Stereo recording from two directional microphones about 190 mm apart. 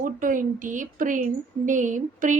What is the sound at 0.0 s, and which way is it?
A woman's voice, 45° right (ahead or behind).